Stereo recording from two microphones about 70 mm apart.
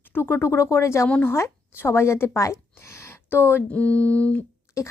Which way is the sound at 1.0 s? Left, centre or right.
Centre.